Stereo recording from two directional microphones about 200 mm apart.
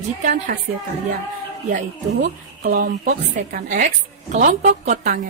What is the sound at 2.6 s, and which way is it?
A woman's voice, 45° right (ahead or behind).